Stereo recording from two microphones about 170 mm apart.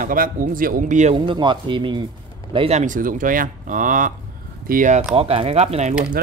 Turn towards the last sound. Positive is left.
turn(degrees=-40)  # may be behind; listen again after turning